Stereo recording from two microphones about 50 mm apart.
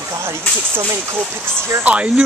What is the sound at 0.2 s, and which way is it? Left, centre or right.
Speech, right.